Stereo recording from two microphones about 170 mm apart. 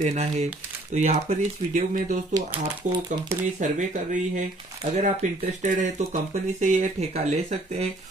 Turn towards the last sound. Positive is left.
turn(degrees=-40)  # may be behind; listen again after turning